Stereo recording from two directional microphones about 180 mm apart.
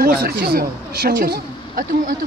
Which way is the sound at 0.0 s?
60° right (ahead or behind).